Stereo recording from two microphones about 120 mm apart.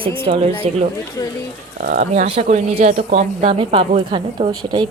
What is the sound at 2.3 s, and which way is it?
A woman's voice, 70° right (ahead or behind).